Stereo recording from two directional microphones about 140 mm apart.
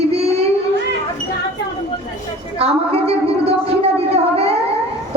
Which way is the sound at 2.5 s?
45° right (ahead or behind).